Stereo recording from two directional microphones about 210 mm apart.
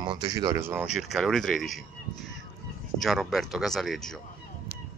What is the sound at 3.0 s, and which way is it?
Speech, centre (ahead or behind).